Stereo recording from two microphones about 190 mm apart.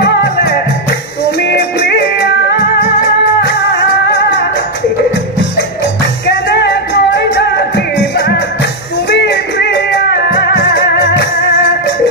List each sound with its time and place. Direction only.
6.5 s music: 60° left (ahead or behind)